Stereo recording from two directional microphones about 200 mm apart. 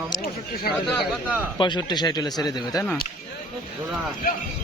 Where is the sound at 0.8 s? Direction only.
Centre (ahead or behind).